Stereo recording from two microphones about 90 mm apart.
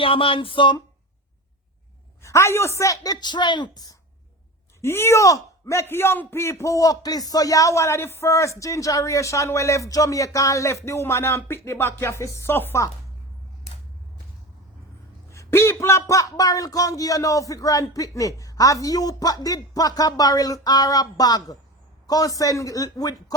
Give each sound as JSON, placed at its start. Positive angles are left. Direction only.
{"t": 0.0, "sound": "speech", "side_deg": 85}
{"t": 2.2, "sound": "speech", "side_deg": 30}
{"t": 4.8, "sound": "speech", "side_deg": 30}
{"t": 10.8, "sound": "a sound", "side_deg": 30}
{"t": 15.3, "sound": "speech", "side_deg": 30}